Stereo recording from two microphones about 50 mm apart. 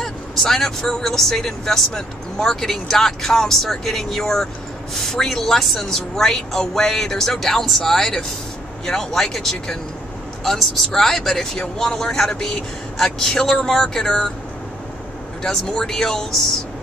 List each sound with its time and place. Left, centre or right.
0.0 s speech: centre
15.4 s speech: centre